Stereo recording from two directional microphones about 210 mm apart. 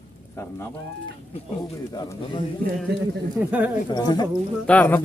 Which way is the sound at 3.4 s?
5° right (ahead or behind).